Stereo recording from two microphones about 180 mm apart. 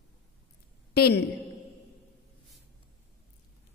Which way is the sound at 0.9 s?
65° left (ahead or behind).